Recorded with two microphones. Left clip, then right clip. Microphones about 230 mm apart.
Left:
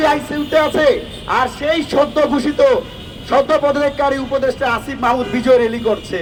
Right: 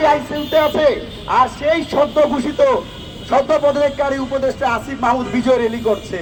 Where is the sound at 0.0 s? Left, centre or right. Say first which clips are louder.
Right 1 dB; left.